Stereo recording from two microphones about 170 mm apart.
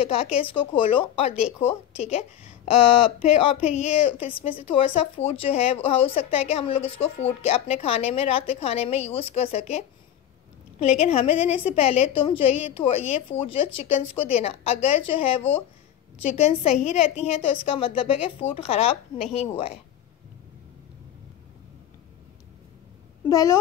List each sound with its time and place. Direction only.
0.0 s a woman's voice: 35° left (ahead or behind)
23.2 s speech: 20° left (ahead or behind)